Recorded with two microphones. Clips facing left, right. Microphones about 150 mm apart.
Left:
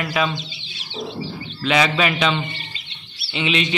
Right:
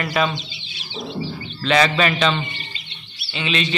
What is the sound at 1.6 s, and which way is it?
Speech, 5° left (ahead or behind).